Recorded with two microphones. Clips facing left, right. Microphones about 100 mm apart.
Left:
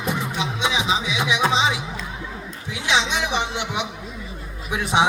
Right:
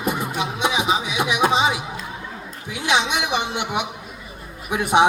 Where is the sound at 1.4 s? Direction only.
50° right (ahead or behind).